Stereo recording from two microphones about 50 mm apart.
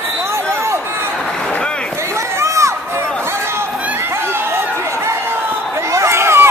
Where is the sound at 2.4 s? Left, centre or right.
Right.